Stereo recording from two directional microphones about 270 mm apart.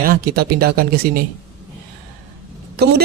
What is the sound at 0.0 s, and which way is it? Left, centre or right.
Speech, right.